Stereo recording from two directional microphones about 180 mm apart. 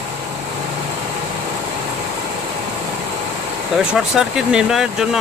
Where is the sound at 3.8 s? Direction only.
5° right (ahead or behind).